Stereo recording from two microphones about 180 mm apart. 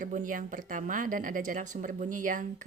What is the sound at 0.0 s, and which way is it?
Speech, 45° right (ahead or behind).